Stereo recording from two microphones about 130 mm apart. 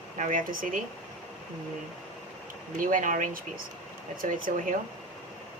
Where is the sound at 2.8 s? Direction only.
90° right.